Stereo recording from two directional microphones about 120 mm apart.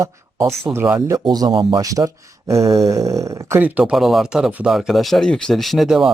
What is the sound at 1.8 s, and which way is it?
Speech, 30° right (ahead or behind).